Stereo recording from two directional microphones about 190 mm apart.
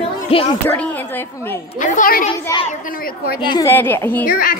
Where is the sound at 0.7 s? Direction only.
10° left (ahead or behind).